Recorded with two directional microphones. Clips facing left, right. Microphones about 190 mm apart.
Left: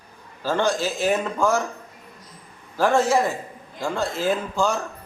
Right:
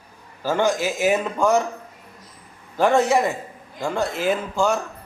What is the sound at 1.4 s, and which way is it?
Speech, 20° right (ahead or behind).